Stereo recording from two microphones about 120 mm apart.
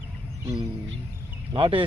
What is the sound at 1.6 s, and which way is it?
Speech, 50° right (ahead or behind).